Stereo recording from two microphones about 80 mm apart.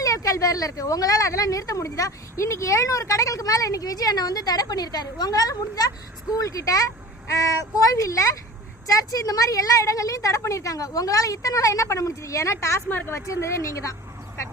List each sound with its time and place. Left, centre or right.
0.0 s a woman's voice: left